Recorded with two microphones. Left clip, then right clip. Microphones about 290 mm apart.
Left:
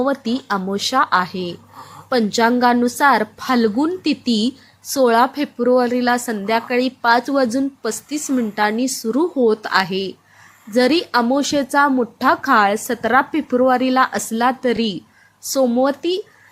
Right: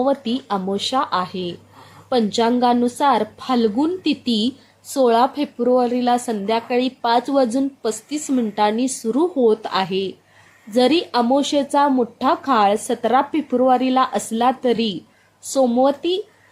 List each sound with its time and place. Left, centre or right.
0.0 s a woman's voice: centre
4.1 s speech: left
4.9 s a woman's voice: centre